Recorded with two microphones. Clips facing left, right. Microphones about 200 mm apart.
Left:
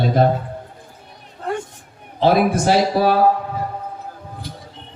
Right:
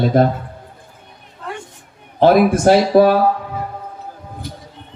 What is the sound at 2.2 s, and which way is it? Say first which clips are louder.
Speech: right 4 dB; 55° right (ahead or behind).